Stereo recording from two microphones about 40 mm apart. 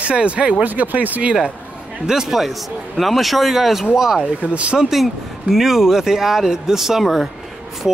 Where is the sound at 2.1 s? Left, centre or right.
Centre.